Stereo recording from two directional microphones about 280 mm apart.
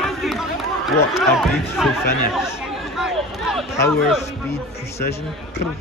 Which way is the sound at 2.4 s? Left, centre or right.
Centre.